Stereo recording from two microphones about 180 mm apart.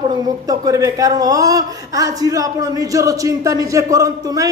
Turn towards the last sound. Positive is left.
turn(degrees=-20)  # may be behind; listen again after turning